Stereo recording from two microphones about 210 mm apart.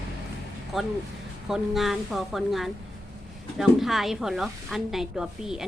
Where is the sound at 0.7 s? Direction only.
Centre (ahead or behind).